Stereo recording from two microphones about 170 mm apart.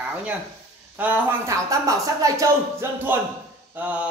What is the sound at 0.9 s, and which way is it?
Speech, 15° right (ahead or behind).